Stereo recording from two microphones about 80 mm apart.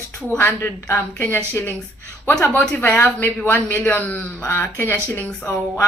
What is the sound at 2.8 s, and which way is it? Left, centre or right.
A woman's voice, left.